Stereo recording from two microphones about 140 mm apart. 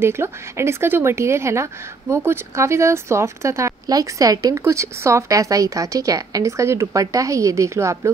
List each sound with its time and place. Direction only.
0.0 s speech: 20° right (ahead or behind)